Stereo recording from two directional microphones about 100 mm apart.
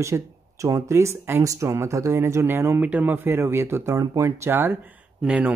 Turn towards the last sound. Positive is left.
turn(degrees=-15)  # may be behind; listen again after turning